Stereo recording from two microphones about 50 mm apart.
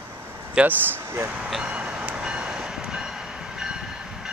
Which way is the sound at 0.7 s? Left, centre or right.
Right.